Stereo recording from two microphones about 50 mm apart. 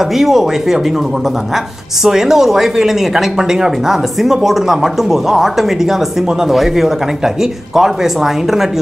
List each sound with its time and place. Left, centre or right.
0.0 s speech: centre
2.0 s speech: centre